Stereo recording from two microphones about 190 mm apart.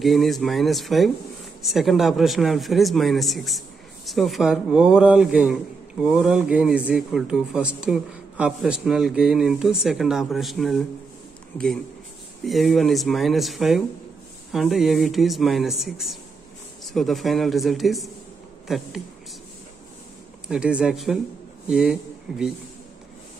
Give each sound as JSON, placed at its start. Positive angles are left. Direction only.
{"t": 0.0, "sound": "speech", "side_deg": 0}
{"t": 20.4, "sound": "speech", "side_deg": -5}